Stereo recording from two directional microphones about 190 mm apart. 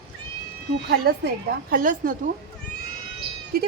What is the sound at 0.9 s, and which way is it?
A woman's voice, 55° right (ahead or behind).